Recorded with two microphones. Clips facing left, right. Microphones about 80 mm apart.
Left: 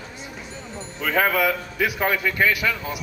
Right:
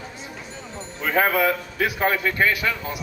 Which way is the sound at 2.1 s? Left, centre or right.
Centre.